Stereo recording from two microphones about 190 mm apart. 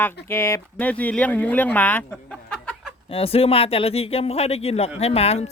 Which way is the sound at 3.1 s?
30° left (ahead or behind).